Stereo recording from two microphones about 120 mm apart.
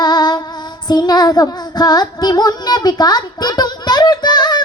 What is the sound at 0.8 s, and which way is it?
Child singing, 35° left (ahead or behind).